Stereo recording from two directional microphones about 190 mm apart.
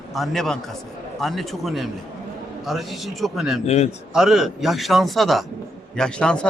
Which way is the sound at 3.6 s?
35° left (ahead or behind).